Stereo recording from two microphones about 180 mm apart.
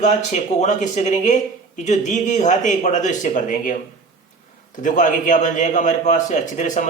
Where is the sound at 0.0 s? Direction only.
40° left (ahead or behind).